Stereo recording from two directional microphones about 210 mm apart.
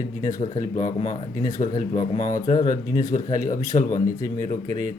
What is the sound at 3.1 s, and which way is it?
Speech, 35° left (ahead or behind).